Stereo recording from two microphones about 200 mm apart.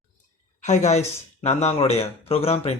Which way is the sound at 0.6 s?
35° left (ahead or behind).